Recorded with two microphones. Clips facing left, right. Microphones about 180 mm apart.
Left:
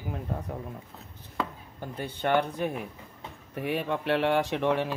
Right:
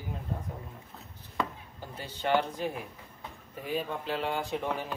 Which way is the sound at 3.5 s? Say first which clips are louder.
Left 4 dB; 70° left (ahead or behind).